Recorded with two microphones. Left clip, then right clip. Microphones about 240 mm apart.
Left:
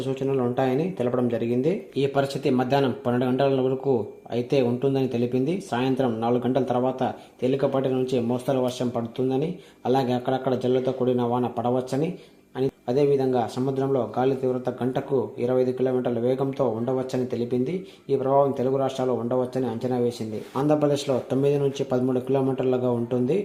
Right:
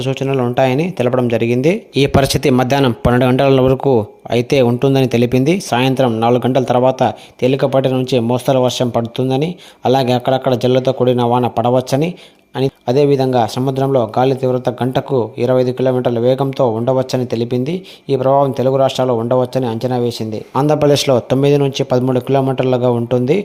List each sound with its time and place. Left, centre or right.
0.0 s a man's voice: right